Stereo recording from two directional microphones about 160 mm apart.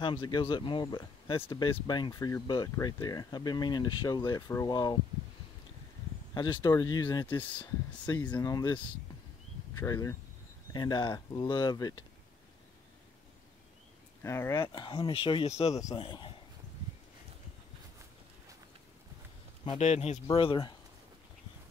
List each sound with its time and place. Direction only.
0.0 s speech: 30° left (ahead or behind)
6.3 s speech: 25° left (ahead or behind)
8.0 s speech: 10° left (ahead or behind)
8.5 s speech: 25° left (ahead or behind)
14.2 s speech: 15° left (ahead or behind)
14.7 s a man's voice: 30° left (ahead or behind)
19.8 s speech: 45° left (ahead or behind)
20.3 s speech: 30° left (ahead or behind)